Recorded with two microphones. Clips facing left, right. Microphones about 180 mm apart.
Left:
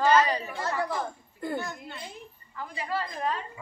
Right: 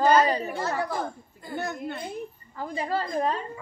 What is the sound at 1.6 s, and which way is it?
Speech, 60° right (ahead or behind).